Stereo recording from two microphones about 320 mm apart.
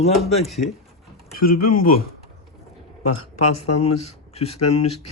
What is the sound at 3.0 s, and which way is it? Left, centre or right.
Speech, left.